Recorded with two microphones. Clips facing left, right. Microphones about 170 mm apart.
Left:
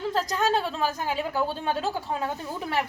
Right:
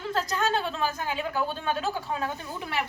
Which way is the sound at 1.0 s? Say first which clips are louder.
Left 2 dB; 35° left (ahead or behind).